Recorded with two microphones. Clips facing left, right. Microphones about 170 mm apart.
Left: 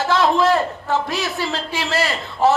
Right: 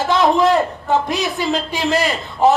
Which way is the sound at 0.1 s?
20° right (ahead or behind).